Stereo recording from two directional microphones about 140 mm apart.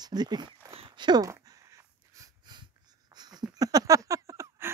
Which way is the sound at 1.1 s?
25° right (ahead or behind).